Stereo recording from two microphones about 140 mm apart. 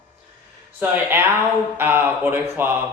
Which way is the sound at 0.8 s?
15° right (ahead or behind).